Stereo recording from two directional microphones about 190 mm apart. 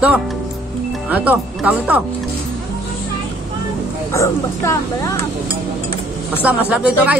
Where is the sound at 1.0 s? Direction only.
10° right (ahead or behind).